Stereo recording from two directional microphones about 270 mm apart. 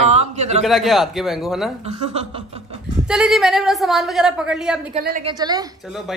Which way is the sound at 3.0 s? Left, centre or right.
Centre.